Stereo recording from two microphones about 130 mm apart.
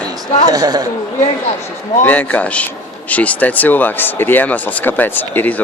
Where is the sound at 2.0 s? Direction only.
15° left (ahead or behind).